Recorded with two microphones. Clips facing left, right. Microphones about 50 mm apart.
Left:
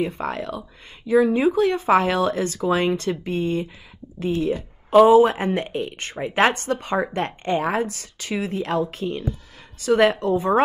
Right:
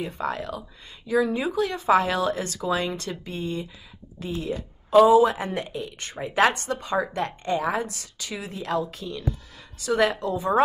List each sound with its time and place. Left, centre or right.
0.0 s speech: left
5.7 s speech: left